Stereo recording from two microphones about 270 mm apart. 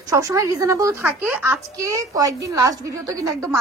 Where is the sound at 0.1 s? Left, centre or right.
Centre.